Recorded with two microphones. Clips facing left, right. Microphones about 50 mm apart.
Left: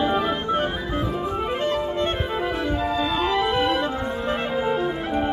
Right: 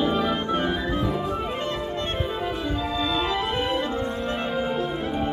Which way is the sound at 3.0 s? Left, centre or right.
Left.